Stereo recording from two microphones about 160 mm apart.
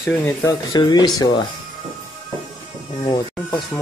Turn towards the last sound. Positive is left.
turn(degrees=5)  # may be behind; listen again after turning